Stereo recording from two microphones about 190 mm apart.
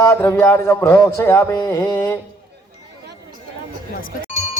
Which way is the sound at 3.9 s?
45° left (ahead or behind).